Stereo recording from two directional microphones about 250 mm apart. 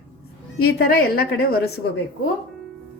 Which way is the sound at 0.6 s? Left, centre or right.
Left.